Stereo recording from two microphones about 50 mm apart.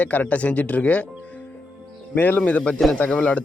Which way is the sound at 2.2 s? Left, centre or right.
Left.